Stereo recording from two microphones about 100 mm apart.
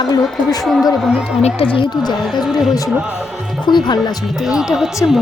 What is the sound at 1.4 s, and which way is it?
Speech, 80° left.